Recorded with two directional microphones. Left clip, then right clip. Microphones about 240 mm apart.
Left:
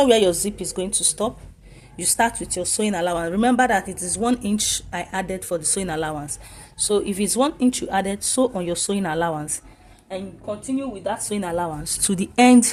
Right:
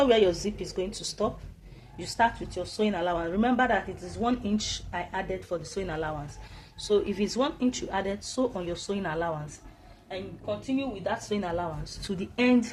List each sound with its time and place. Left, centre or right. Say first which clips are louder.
0.0 s speech: left 6 dB; left
11.0 s speech: left 4 dB; left